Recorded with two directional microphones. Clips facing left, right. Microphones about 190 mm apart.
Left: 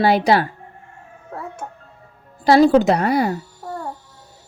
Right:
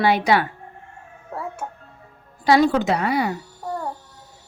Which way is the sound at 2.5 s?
35° left (ahead or behind).